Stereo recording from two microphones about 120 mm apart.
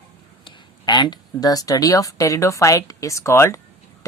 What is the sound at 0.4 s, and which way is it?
Speech, 35° left (ahead or behind).